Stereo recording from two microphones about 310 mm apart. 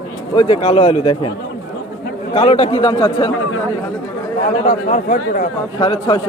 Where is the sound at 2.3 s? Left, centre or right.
Centre.